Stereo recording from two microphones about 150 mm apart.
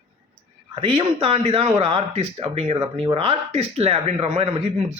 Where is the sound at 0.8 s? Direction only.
35° right (ahead or behind).